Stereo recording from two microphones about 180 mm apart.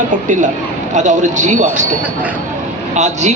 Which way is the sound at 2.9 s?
40° right (ahead or behind).